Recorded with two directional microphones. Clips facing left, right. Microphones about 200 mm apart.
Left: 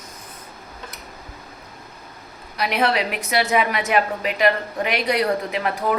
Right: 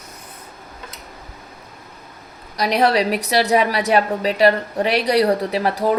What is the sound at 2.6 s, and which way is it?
A woman's voice, 35° right (ahead or behind).